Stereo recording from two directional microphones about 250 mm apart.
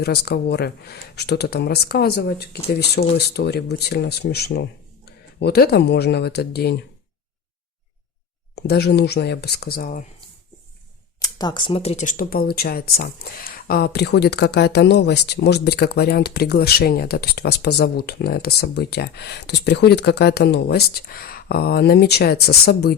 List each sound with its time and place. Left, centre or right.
0.0 s speech: left
8.5 s speech: left
11.2 s speech: centre; by 23.0 s left